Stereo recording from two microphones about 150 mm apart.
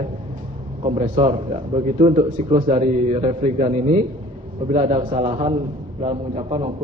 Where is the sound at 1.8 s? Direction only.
50° right (ahead or behind).